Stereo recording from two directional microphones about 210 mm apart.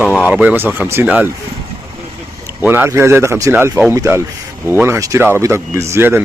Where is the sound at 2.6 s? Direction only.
10° right (ahead or behind).